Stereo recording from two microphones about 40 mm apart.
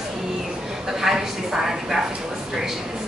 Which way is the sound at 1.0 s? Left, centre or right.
Centre.